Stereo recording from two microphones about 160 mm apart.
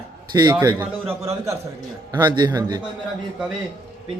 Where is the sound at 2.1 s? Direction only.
25° right (ahead or behind).